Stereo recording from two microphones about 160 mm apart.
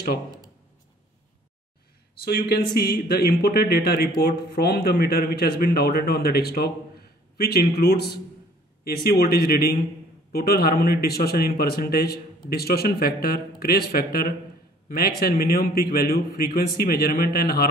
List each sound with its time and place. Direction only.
2.2 s a man's voice: 75° left (ahead or behind)
8.8 s a man's voice: 70° left (ahead or behind)